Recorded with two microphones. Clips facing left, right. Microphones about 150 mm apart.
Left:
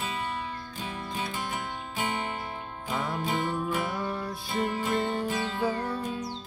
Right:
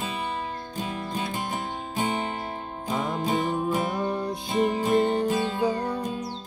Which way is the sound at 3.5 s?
20° right (ahead or behind).